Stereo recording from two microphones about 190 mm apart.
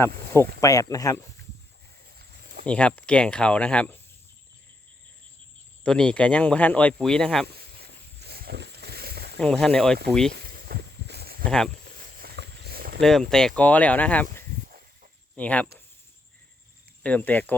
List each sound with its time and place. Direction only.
0.6 s speech: 15° left (ahead or behind)
2.1 s a sound: 55° right (ahead or behind)
2.6 s speech: 5° left (ahead or behind)
5.8 s speech: 5° left (ahead or behind)
8.2 s a sound: 55° right (ahead or behind)
9.4 s speech: 5° left (ahead or behind)
10.3 s a sound: 55° right (ahead or behind)
11.4 s speech: 5° left (ahead or behind)
11.9 s walk: 50° right (ahead or behind)
13.0 s speech: centre (ahead or behind)
14.7 s walk: 45° right (ahead or behind)
15.4 s speech: 5° left (ahead or behind)
17.0 s speech: 5° left (ahead or behind)